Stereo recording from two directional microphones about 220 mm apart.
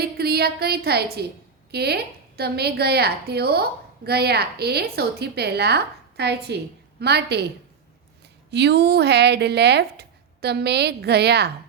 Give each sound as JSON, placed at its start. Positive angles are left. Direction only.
{"t": 0.0, "sound": "a woman's voice", "side_deg": -45}
{"t": 8.4, "sound": "a woman's voice", "side_deg": -50}